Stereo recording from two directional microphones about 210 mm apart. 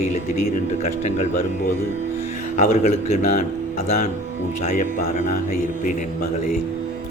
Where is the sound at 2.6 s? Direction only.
35° left (ahead or behind).